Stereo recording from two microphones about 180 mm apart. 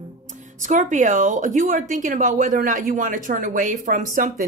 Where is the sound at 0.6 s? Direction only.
45° right (ahead or behind).